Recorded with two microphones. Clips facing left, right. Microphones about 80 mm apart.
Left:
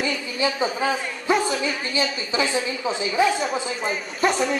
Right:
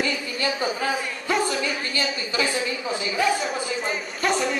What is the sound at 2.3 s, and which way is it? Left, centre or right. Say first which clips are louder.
Speech: even; left.